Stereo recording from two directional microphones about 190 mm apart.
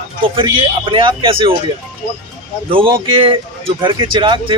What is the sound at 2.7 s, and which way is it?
Speech, 30° right (ahead or behind).